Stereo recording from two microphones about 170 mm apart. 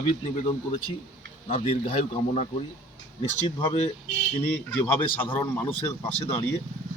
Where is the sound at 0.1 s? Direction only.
30° left (ahead or behind).